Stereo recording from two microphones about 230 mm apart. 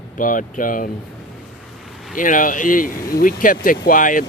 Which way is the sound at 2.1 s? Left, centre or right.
Left.